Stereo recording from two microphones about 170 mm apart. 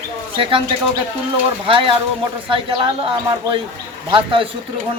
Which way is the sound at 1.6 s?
30° right (ahead or behind).